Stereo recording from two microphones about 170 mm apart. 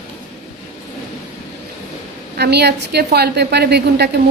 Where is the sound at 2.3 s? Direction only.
75° right (ahead or behind).